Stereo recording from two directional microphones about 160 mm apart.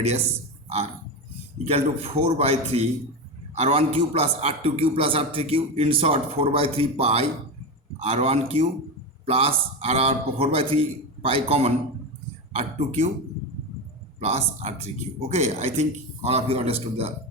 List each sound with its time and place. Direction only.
1.6 s a man's voice: 40° right (ahead or behind)
14.2 s a man's voice: 40° right (ahead or behind)